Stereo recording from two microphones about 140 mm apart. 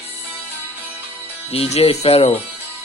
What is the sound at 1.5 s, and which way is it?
Speech, 45° left (ahead or behind).